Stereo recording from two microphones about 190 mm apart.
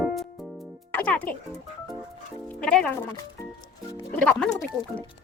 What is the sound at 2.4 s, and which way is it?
Music, 5° left (ahead or behind).